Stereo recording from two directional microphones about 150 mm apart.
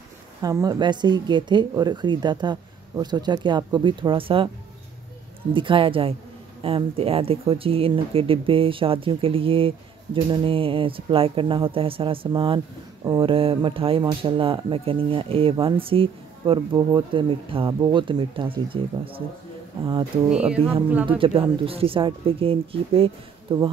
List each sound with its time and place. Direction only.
0.4 s speech: 25° right (ahead or behind)
5.5 s speech: 35° right (ahead or behind)
20.2 s speech: 5° right (ahead or behind)
21.2 s speech: 35° right (ahead or behind)